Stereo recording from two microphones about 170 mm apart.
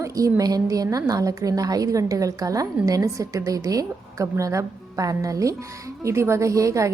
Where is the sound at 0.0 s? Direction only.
20° right (ahead or behind).